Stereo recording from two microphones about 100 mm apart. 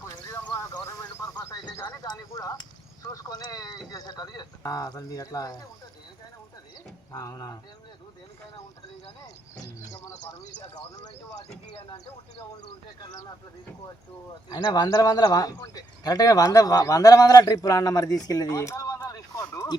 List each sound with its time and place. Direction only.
0.6 s a sound: 30° left (ahead or behind)
2.0 s a man's voice: 35° left (ahead or behind)
7.1 s a man's voice: 35° left (ahead or behind)
9.8 s a man's voice: 35° left (ahead or behind)
14.5 s a man's voice: 40° left (ahead or behind)
19.0 s a sound: 35° left (ahead or behind)